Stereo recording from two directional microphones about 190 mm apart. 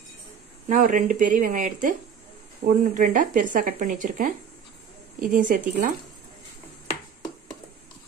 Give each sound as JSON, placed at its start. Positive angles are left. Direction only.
{"t": 0.7, "sound": "speech", "side_deg": -45}